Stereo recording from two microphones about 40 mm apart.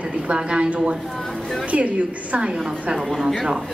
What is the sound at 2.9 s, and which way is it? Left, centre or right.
Speech, centre.